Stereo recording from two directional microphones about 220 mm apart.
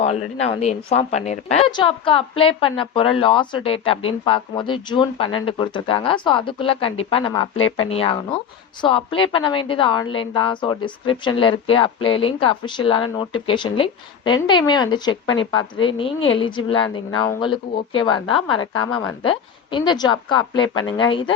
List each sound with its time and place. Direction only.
0.0 s a woman's voice: 30° left (ahead or behind)
18.9 s speech: 5° left (ahead or behind)
19.7 s a woman's voice: 20° left (ahead or behind)